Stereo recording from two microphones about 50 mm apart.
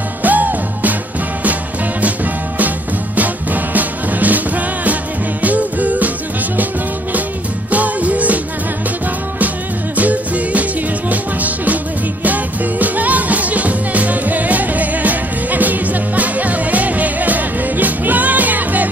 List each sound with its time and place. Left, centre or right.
0.2 s music: right
3.2 s music: right
9.9 s music: right